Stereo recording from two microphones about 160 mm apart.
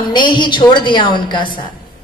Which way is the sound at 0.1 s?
30° left (ahead or behind).